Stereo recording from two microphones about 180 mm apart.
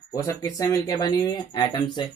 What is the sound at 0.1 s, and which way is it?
Speech, 20° left (ahead or behind).